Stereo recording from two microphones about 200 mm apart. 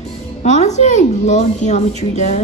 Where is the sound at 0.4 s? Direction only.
35° left (ahead or behind).